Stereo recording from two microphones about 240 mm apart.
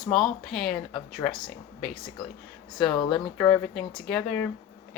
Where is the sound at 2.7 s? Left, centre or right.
Centre.